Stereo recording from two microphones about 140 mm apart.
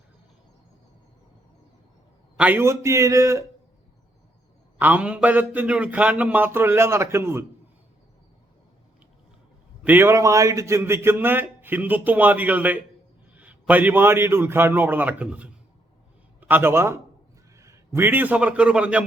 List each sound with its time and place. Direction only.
2.4 s a man's voice: 15° right (ahead or behind)
4.8 s a man's voice: 10° right (ahead or behind)
9.8 s a man's voice: 15° right (ahead or behind)